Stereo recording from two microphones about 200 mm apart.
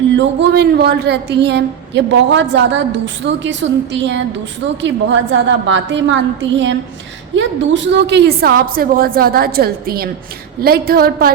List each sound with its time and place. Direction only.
0.2 s a woman's voice: 60° right (ahead or behind)